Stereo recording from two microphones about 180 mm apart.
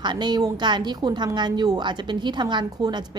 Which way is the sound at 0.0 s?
25° right (ahead or behind).